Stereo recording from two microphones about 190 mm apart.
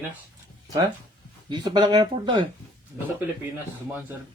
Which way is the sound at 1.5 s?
25° right (ahead or behind).